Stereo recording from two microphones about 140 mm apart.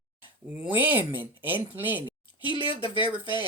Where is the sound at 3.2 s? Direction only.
30° left (ahead or behind).